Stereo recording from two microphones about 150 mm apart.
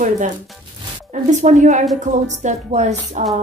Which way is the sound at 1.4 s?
55° right (ahead or behind).